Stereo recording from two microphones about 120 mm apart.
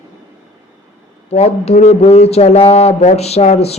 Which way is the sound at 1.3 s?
60° left (ahead or behind).